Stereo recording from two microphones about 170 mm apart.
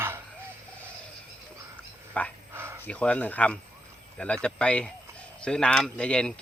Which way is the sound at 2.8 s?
5° left (ahead or behind).